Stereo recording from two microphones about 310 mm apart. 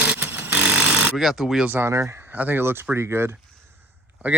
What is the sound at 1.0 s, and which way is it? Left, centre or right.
Speech, centre.